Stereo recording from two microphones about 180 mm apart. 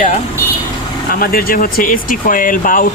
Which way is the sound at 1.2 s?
55° left (ahead or behind).